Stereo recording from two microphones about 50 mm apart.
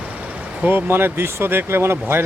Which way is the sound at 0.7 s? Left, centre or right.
Right.